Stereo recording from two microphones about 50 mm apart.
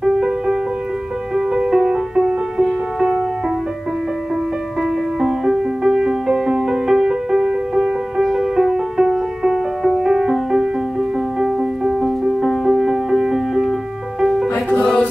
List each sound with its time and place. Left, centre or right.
0.0 s music: centre
5.2 s music: centre
14.5 s music: left